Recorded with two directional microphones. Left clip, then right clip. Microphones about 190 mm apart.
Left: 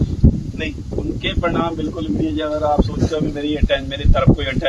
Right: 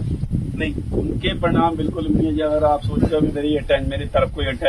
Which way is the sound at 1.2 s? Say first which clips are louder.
Right 1 dB; 20° right (ahead or behind).